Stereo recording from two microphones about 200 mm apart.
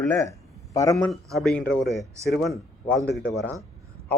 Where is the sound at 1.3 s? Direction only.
5° left (ahead or behind).